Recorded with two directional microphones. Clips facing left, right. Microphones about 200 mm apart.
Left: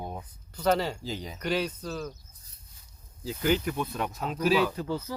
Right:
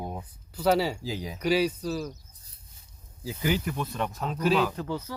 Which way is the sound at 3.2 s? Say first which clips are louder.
Left 2 dB; 5° right (ahead or behind).